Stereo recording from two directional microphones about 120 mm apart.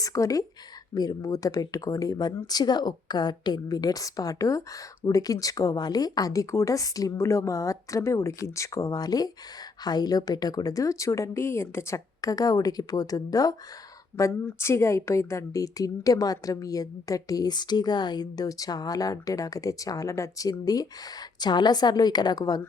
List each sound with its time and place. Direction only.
0.0 s a woman's voice: 30° left (ahead or behind)